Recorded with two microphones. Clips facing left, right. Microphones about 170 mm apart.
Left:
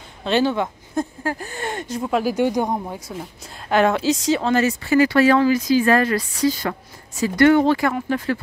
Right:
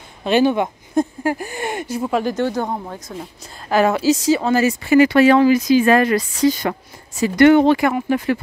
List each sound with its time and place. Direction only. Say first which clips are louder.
0.2 s speech: right 4 dB; 15° right (ahead or behind)
2.3 s speech: left 1 dB; 15° left (ahead or behind); by 8.4 s 15° right (ahead or behind)